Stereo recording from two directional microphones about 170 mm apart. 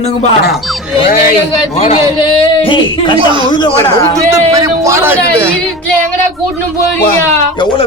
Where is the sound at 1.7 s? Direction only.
35° left (ahead or behind).